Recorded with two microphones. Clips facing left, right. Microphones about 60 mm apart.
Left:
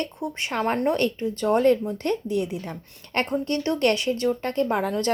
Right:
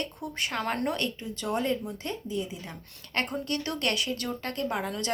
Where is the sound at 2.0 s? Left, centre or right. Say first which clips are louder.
Left 8 dB; left.